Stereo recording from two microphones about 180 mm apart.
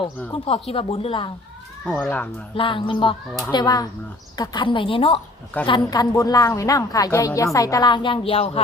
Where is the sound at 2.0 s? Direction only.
10° left (ahead or behind).